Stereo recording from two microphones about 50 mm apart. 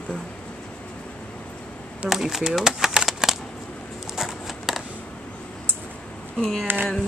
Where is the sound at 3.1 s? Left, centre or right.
Centre.